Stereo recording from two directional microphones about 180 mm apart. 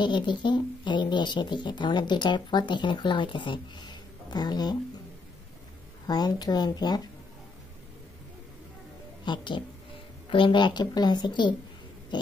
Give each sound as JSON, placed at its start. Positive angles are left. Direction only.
{"t": 0.0, "sound": "speech", "side_deg": 25}
{"t": 6.0, "sound": "speech", "side_deg": 20}
{"t": 9.2, "sound": "speech", "side_deg": 25}
{"t": 12.1, "sound": "a sound", "side_deg": 25}